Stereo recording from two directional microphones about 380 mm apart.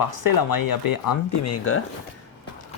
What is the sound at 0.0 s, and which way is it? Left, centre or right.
Speech, left.